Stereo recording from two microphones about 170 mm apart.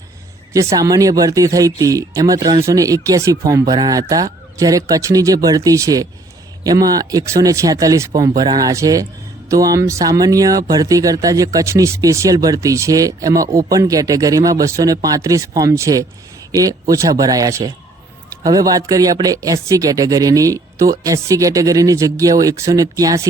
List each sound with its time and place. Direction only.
0.5 s speech: 20° right (ahead or behind)